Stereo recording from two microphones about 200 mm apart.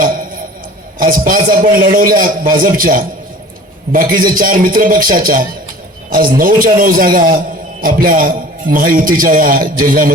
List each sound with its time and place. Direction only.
0.0 s a sound: 45° right (ahead or behind)
0.9 s a man's voice: 45° right (ahead or behind)
4.2 s a man's voice: 45° right (ahead or behind)